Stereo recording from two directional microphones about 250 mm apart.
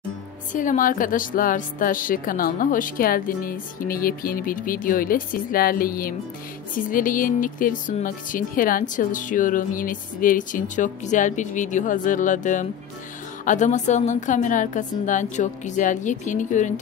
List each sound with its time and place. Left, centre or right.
0.5 s a woman's voice: left